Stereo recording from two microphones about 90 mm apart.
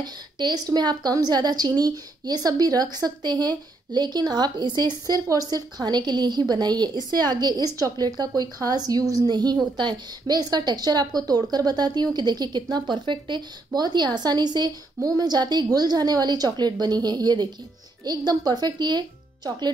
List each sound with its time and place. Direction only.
0.0 s a woman's voice: 50° right (ahead or behind)
13.7 s a woman's voice: 50° right (ahead or behind)